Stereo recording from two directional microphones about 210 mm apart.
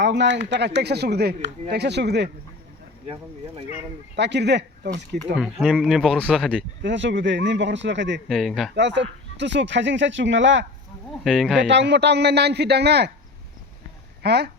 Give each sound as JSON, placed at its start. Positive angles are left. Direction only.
{"t": 0.0, "sound": "speech", "side_deg": -55}
{"t": 4.1, "sound": "speech", "side_deg": -55}
{"t": 5.4, "sound": "speech", "side_deg": 0}
{"t": 6.8, "sound": "speech", "side_deg": -60}
{"t": 8.3, "sound": "speech", "side_deg": 0}
{"t": 8.7, "sound": "speech", "side_deg": -55}
{"t": 11.2, "sound": "speech", "side_deg": 0}
{"t": 11.7, "sound": "speech", "side_deg": -55}
{"t": 14.2, "sound": "speech", "side_deg": -50}